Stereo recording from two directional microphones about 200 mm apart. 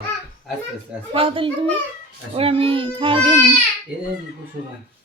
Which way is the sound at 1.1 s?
30° right (ahead or behind).